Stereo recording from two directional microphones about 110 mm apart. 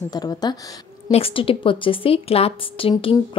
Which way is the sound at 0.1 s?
35° left (ahead or behind).